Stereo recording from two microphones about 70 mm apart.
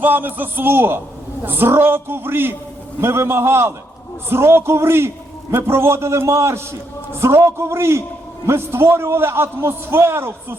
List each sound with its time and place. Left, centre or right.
0.0 s a man's voice: right